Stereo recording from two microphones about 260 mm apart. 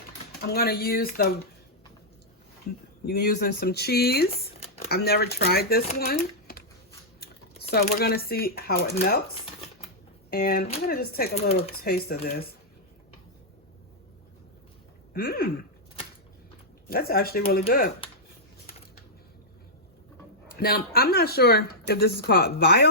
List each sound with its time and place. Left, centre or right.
0.4 s speech: left
3.1 s speech: left
4.3 s a sound: left
4.9 s speech: left
7.7 s speech: left
10.3 s speech: left
15.1 s a sound: left
16.9 s speech: left
20.5 s speech: left